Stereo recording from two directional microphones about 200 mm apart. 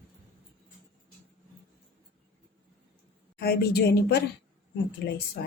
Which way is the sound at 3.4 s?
55° left (ahead or behind).